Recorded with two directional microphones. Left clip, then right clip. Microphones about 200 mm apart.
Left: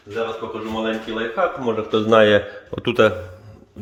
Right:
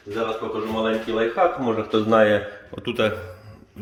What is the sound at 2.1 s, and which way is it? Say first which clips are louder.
A man's voice: left 4 dB; 55° left (ahead or behind).